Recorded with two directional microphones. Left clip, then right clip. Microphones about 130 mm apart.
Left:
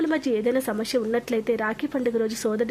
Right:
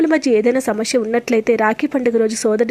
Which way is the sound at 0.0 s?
35° right (ahead or behind).